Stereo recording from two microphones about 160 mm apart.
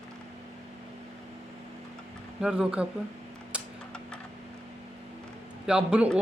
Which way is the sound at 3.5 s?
5° right (ahead or behind).